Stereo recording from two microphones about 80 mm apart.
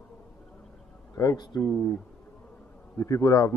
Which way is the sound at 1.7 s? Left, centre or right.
Centre.